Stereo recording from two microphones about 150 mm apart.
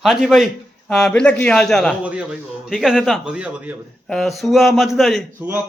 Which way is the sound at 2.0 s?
10° right (ahead or behind).